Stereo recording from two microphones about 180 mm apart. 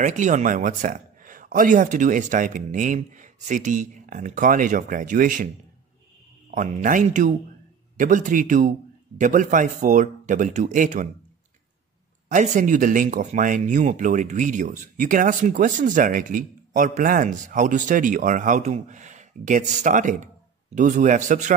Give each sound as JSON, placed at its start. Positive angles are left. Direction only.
{"t": 0.0, "sound": "speech", "side_deg": -45}
{"t": 6.5, "sound": "speech", "side_deg": -40}
{"t": 12.3, "sound": "speech", "side_deg": -45}